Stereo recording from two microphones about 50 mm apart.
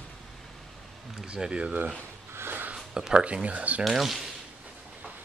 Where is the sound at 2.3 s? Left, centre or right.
Right.